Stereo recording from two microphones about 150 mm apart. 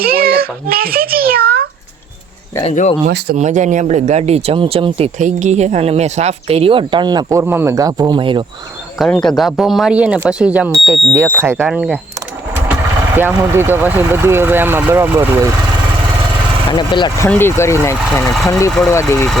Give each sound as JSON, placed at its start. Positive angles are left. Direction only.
{"t": 0.0, "sound": "a child's voice", "side_deg": -90}
{"t": 2.6, "sound": "speech", "side_deg": 50}
{"t": 3.3, "sound": "speech", "side_deg": -55}
{"t": 9.0, "sound": "speech", "side_deg": 5}
{"t": 13.1, "sound": "speech", "side_deg": -15}
{"t": 16.7, "sound": "speech", "side_deg": 30}
{"t": 17.2, "sound": "speech", "side_deg": 15}